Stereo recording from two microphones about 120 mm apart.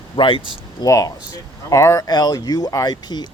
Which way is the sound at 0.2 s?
45° left (ahead or behind).